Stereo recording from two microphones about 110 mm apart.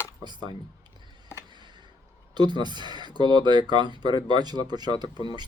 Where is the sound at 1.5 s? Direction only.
45° right (ahead or behind).